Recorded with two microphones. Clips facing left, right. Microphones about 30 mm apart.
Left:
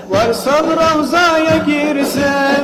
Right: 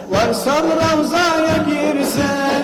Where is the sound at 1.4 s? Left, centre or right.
Left.